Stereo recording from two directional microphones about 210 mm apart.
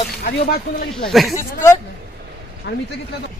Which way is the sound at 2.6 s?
55° left (ahead or behind).